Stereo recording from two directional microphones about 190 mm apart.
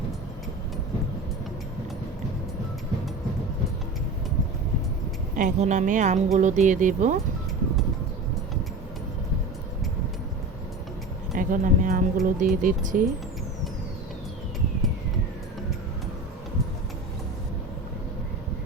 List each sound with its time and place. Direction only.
5.4 s speech: 40° right (ahead or behind)
11.3 s speech: 45° right (ahead or behind)